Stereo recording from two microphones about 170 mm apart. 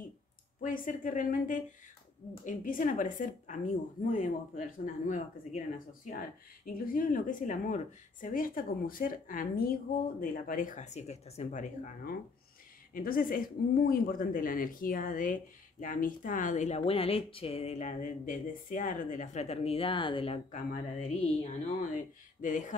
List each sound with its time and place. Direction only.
0.6 s speech: 50° left (ahead or behind); by 20.3 s 30° left (ahead or behind)
20.5 s speech: 45° left (ahead or behind)
22.4 s speech: 50° left (ahead or behind)